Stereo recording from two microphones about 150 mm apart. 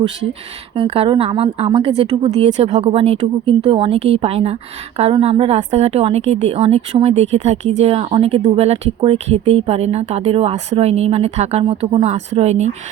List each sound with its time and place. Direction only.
0.8 s a woman's voice: 40° right (ahead or behind)